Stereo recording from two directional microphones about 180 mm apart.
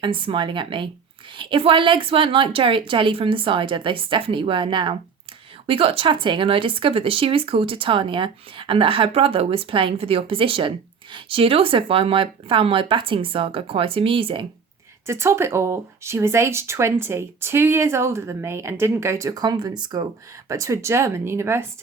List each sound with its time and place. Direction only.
0.0 s speech: 30° right (ahead or behind)
15.0 s speech: 15° right (ahead or behind)